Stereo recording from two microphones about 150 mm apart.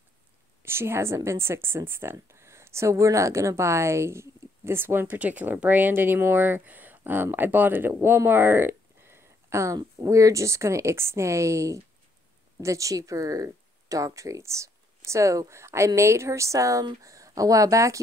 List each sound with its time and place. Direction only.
0.6 s a woman's voice: 15° right (ahead or behind)